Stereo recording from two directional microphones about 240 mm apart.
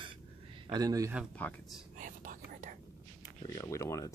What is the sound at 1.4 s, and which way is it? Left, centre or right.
Speech, centre.